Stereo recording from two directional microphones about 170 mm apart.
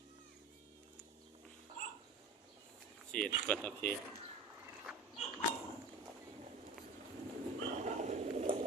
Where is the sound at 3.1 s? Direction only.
5° left (ahead or behind).